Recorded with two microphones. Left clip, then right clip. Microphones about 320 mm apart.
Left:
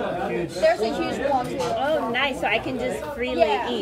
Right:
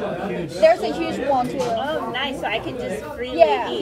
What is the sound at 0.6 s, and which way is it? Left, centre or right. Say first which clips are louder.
Speech: right 5 dB; right.